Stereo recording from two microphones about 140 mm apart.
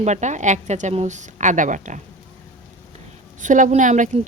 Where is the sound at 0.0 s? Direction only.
55° right (ahead or behind).